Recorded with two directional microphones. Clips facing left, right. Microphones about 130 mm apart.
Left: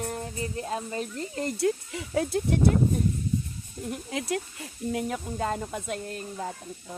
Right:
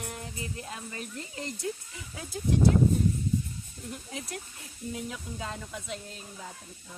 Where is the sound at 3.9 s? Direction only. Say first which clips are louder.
Left 9 dB; 90° left.